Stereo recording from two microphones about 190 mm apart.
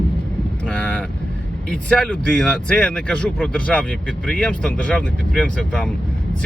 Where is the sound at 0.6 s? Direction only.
5° left (ahead or behind).